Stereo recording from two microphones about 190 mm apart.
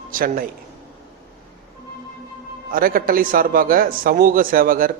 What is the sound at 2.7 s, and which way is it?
A man's voice, 50° right (ahead or behind).